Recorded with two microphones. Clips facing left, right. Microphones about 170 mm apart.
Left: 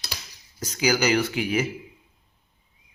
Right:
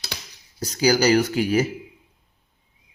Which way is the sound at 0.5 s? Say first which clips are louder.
Right 4 dB; 35° right (ahead or behind).